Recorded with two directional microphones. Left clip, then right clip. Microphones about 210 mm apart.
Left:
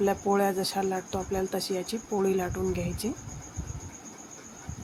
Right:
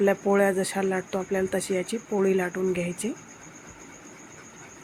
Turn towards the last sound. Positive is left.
turn(degrees=0)  # may be behind; listen again after turning